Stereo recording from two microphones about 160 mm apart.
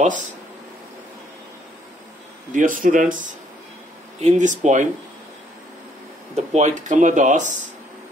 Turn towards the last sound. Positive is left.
turn(degrees=-50)  # may be behind; listen again after turning